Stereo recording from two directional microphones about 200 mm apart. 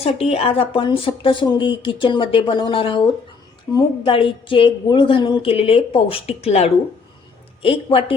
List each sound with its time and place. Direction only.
0.0 s a woman's voice: 30° left (ahead or behind)